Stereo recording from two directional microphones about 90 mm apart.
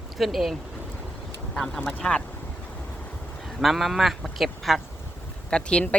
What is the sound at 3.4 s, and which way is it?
Speech, centre (ahead or behind).